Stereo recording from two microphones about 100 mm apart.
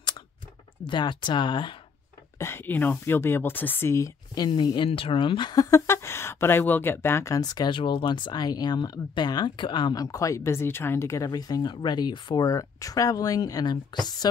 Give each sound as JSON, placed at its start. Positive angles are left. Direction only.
{"t": 0.8, "sound": "speech", "side_deg": 50}
{"t": 2.3, "sound": "speech", "side_deg": 25}
{"t": 4.5, "sound": "speech", "side_deg": 50}
{"t": 4.8, "sound": "speech", "side_deg": 65}
{"t": 7.3, "sound": "speech", "side_deg": 40}
{"t": 12.4, "sound": "a woman's voice", "side_deg": 35}